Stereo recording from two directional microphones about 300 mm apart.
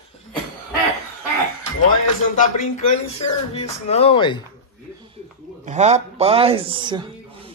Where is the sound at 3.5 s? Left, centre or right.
Centre.